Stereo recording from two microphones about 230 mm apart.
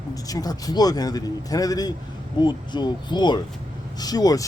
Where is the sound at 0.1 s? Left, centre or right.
Centre.